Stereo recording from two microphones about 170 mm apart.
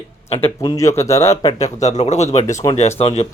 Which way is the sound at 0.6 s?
20° left (ahead or behind).